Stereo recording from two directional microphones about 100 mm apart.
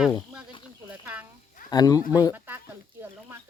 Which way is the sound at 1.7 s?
40° left (ahead or behind).